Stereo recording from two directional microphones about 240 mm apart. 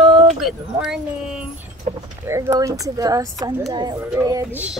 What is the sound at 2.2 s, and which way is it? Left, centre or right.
Speech, centre.